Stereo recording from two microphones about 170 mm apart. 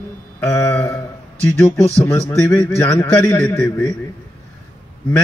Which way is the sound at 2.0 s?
15° left (ahead or behind).